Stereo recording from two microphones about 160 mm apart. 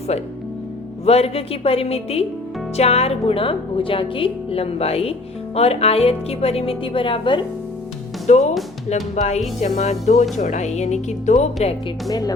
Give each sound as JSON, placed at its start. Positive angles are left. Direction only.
{"t": 0.1, "sound": "a woman's voice", "side_deg": 40}
{"t": 8.3, "sound": "speech", "side_deg": 45}
{"t": 12.0, "sound": "speech", "side_deg": 25}